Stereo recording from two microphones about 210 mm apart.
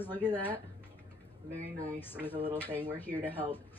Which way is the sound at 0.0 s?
10° left (ahead or behind).